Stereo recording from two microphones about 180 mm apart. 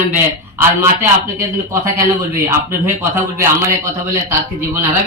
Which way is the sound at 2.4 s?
15° right (ahead or behind).